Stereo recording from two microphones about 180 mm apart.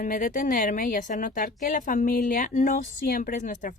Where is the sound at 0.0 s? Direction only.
45° left (ahead or behind).